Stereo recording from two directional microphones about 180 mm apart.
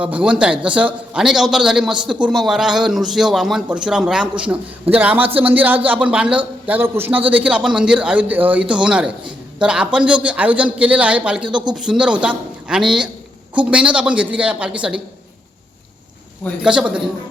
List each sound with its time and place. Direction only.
0.0 s a man's voice: 5° right (ahead or behind)
11.4 s speech: 25° right (ahead or behind)
11.7 s a man's voice: 5° right (ahead or behind)
16.6 s a man's voice: 5° right (ahead or behind)